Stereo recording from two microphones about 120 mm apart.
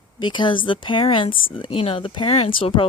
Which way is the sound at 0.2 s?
40° left (ahead or behind).